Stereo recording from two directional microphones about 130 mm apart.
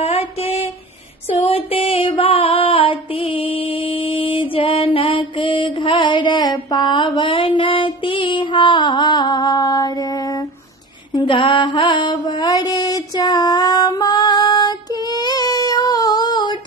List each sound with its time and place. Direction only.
0.0 s a sound: 50° left (ahead or behind)
1.5 s music: 45° left (ahead or behind); by 9.8 s 30° left (ahead or behind)
11.1 s mantra: 40° left (ahead or behind)